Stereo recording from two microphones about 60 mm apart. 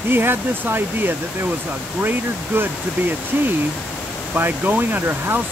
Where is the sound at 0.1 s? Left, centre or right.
Right.